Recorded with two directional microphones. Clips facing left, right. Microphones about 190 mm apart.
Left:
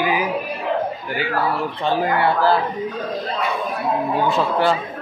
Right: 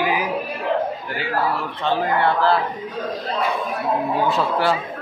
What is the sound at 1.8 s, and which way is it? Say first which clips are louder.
Speech: even; 10° left (ahead or behind).